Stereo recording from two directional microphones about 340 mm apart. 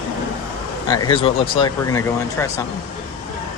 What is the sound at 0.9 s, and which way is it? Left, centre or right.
Speech, centre.